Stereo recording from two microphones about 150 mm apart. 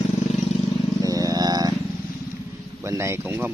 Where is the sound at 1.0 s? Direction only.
25° right (ahead or behind).